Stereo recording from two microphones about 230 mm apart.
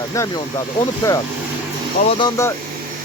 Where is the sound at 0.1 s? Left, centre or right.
Centre.